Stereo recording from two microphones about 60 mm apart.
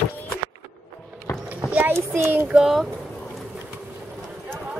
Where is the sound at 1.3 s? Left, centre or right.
Left.